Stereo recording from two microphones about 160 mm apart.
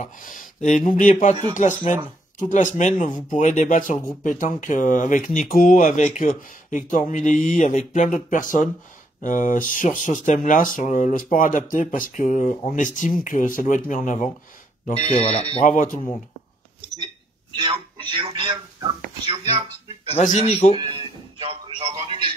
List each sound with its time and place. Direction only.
0.0 s speech: 55° left (ahead or behind)
15.0 s speech: 40° left (ahead or behind)
15.6 s speech: 55° left (ahead or behind)
18.1 s speech: 30° right (ahead or behind)
19.9 s speech: 40° left (ahead or behind)
20.7 s a man's voice: 30° right (ahead or behind)